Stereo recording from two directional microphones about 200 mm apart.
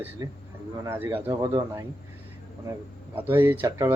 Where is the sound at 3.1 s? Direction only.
10° right (ahead or behind).